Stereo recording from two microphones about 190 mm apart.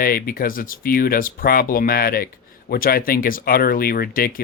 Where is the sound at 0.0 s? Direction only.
50° left (ahead or behind).